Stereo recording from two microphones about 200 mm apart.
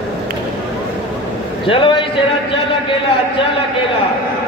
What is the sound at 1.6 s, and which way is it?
Speech, 25° left (ahead or behind).